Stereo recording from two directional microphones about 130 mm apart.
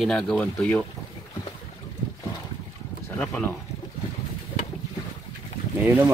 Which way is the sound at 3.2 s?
10° left (ahead or behind).